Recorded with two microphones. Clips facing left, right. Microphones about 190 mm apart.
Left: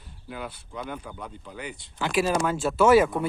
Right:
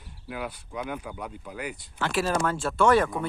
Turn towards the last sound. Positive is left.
turn(degrees=5)  # may be behind; listen again after turning